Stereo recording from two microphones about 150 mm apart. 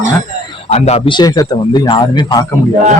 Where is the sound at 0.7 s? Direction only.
45° left (ahead or behind).